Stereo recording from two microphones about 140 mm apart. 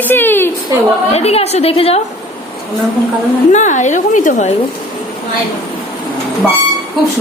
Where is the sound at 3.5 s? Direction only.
60° left (ahead or behind).